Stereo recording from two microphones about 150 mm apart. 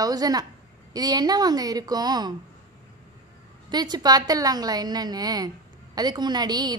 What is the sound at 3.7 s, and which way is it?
A woman's voice, 25° right (ahead or behind).